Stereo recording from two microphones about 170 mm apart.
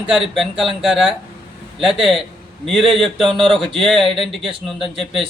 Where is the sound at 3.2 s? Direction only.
30° right (ahead or behind).